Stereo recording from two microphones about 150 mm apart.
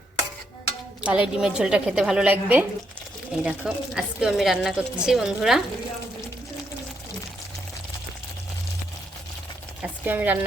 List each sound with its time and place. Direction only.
1.0 s speech: 10° right (ahead or behind)
9.8 s speech: 10° right (ahead or behind)